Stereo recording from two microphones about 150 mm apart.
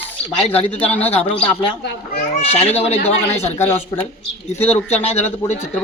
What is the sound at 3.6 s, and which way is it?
Speech, 15° left (ahead or behind).